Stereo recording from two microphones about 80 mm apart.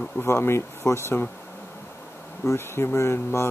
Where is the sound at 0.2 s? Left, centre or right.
Left.